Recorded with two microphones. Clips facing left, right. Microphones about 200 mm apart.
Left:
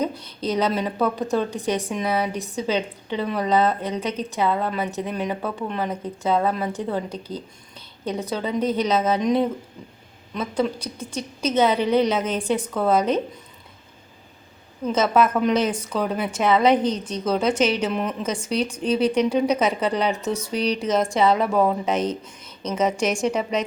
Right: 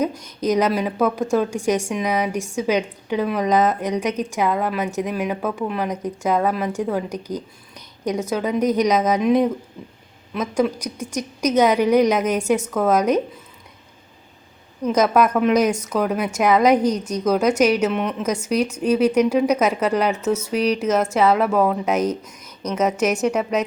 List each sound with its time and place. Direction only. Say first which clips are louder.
0.0 s a woman's voice: right 3 dB; 10° right (ahead or behind)
12.4 s a woman's voice: right 4 dB; 30° left (ahead or behind)
12.8 s a woman's voice: right 1 dB; 10° right (ahead or behind)
14.8 s a woman's voice: right 2 dB; 10° right (ahead or behind)